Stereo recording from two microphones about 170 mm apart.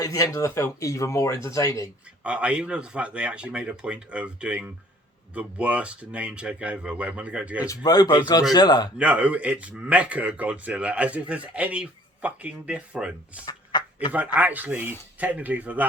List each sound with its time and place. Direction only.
0.0 s speech: 20° left (ahead or behind)
2.2 s speech: 5° right (ahead or behind)
7.7 s speech: 20° left (ahead or behind)
9.0 s speech: 10° right (ahead or behind)
13.4 s a sound: 25° left (ahead or behind)
14.3 s speech: 10° right (ahead or behind)